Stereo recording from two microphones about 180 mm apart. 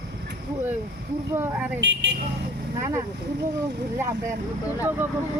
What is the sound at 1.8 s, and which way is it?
Speech, 75° right (ahead or behind).